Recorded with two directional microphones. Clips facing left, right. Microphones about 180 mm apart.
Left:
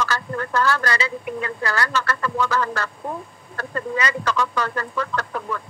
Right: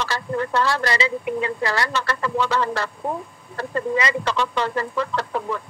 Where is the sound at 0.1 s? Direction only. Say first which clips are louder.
Right 2 dB; 30° right (ahead or behind).